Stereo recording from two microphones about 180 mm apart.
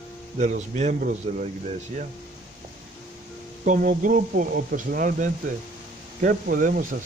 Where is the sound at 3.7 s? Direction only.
50° right (ahead or behind).